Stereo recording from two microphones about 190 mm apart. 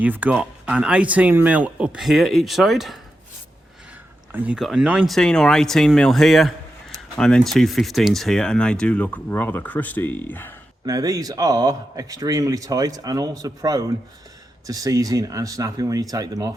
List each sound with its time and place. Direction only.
0.0 s speech: 10° right (ahead or behind)
4.3 s speech: 10° right (ahead or behind); by 10.5 s 10° left (ahead or behind)
10.8 s speech: 20° right (ahead or behind)